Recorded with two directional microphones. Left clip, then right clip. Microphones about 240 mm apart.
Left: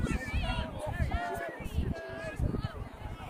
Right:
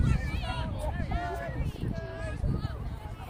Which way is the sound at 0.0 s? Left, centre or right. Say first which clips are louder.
Even; right.